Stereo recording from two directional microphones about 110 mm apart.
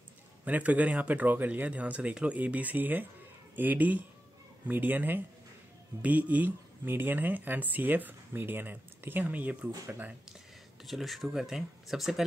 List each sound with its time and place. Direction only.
0.5 s speech: 15° right (ahead or behind)
10.9 s speech: centre (ahead or behind)